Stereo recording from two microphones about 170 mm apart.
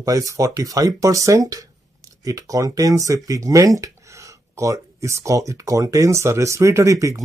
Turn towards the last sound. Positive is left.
turn(degrees=-20)  # may be behind; listen again after turning